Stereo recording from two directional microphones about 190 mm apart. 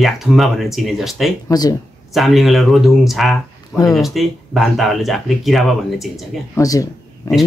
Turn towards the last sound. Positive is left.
turn(degrees=15)  # may be behind; listen again after turning